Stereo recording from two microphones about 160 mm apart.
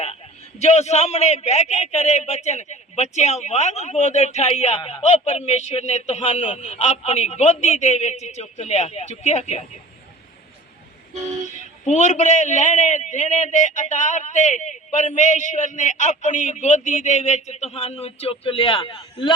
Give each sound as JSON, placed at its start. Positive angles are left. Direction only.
{"t": 0.6, "sound": "a man's voice", "side_deg": 45}
{"t": 11.4, "sound": "a man's voice", "side_deg": 50}